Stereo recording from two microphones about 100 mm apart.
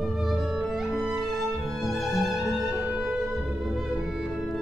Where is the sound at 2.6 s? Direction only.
15° right (ahead or behind).